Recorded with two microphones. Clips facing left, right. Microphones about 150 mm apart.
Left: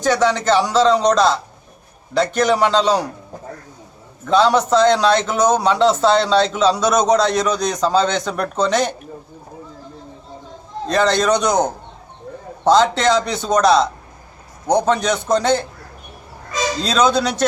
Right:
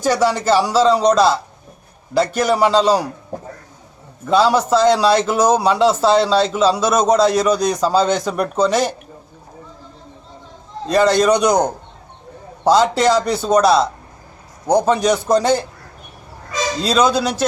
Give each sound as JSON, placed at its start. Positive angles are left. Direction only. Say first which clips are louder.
{"t": 0.0, "sound": "a man's voice", "louder": "even", "side_deg": -10}
{"t": 4.3, "sound": "a man's voice", "louder": "even", "side_deg": -5}
{"t": 10.8, "sound": "a man's voice", "louder": "right 3 dB", "side_deg": -10}
{"t": 16.8, "sound": "a man's voice", "louder": "right 1 dB", "side_deg": -5}